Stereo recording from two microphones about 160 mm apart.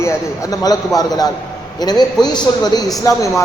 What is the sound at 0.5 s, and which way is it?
A man's voice, 25° left (ahead or behind).